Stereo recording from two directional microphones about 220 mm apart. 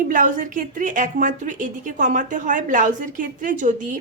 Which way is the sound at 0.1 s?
35° right (ahead or behind).